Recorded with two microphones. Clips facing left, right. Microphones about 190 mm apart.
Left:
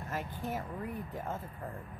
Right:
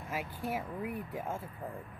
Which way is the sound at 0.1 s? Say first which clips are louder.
Right 1 dB; 10° right (ahead or behind).